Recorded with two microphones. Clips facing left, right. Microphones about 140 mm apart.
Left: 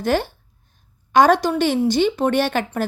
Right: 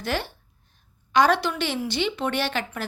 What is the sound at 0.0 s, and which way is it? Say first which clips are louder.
A woman's voice: left 8 dB; 45° left (ahead or behind).